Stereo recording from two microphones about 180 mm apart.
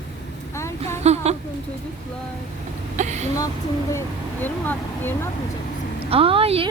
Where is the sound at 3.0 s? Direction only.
40° right (ahead or behind).